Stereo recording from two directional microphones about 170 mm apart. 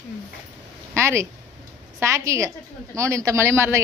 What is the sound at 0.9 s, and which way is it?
Speech, 15° right (ahead or behind).